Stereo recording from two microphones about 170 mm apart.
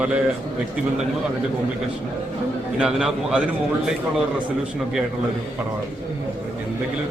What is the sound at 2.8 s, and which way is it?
Speech, 5° right (ahead or behind).